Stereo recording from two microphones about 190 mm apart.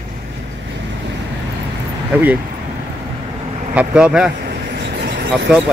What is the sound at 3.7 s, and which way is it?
Speech, 5° right (ahead or behind).